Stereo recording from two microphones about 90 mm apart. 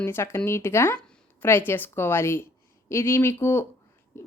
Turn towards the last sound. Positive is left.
turn(degrees=30)  # may be behind; listen again after turning